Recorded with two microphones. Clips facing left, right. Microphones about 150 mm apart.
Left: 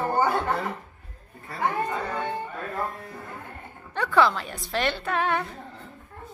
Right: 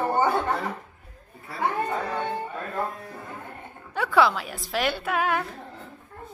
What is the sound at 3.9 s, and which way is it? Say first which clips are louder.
A woman's voice: even; 5° right (ahead or behind).